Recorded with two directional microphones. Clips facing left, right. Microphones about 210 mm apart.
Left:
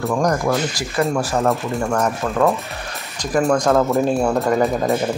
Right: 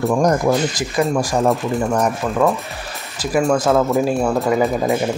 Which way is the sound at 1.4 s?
Centre (ahead or behind).